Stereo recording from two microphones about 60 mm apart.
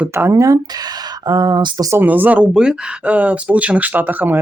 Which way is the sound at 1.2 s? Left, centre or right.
Right.